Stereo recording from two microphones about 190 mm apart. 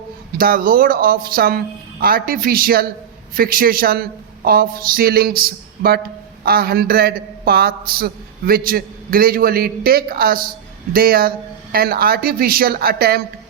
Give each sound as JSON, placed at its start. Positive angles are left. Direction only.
{"t": 0.3, "sound": "a man's voice", "side_deg": -50}